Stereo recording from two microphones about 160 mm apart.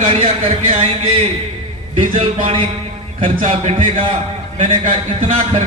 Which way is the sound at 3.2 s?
50° right (ahead or behind).